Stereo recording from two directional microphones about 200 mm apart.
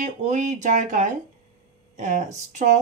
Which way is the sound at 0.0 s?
40° right (ahead or behind).